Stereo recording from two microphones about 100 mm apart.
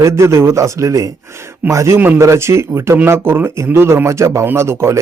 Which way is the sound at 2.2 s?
30° right (ahead or behind).